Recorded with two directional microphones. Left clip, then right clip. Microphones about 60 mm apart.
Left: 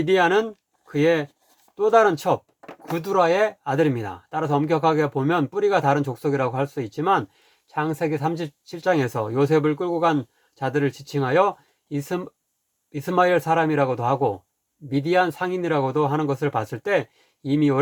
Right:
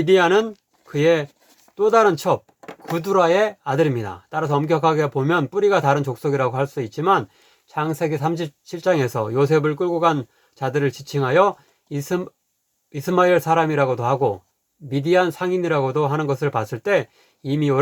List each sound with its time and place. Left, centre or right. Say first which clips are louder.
0.0 s speech: right 3 dB; left